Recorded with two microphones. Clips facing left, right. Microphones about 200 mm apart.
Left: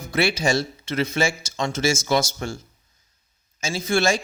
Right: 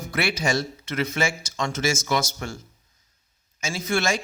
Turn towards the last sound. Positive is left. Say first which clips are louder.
# left 3 dB
turn(degrees=30)  # may be behind; listen again after turning